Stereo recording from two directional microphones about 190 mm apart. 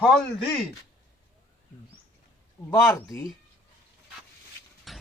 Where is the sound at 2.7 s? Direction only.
15° left (ahead or behind).